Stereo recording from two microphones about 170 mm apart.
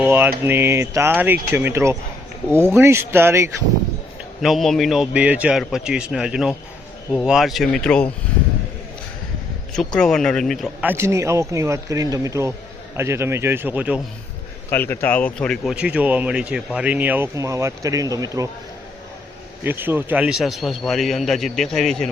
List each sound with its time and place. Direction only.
0.0 s speech: 10° right (ahead or behind)
4.4 s a man's voice: centre (ahead or behind)
9.7 s a man's voice: 5° left (ahead or behind)
10.8 s speech: 15° right (ahead or behind)
14.7 s speech: 10° left (ahead or behind)
15.7 s speech: 5° right (ahead or behind)
19.6 s a man's voice: 10° right (ahead or behind)